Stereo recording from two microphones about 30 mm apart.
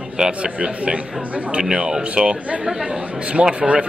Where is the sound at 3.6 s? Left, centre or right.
Right.